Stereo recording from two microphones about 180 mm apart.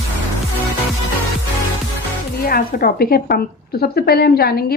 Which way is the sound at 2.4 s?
55° left (ahead or behind).